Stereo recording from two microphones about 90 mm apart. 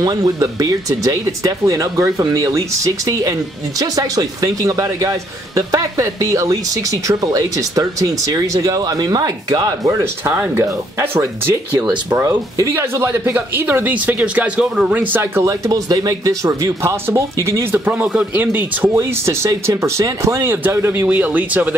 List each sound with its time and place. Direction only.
0.0 s a man's voice: 45° right (ahead or behind); by 15.4 s 20° right (ahead or behind)
15.4 s a man's voice: 40° right (ahead or behind); by 18.9 s 20° right (ahead or behind)
18.9 s a man's voice: 30° right (ahead or behind)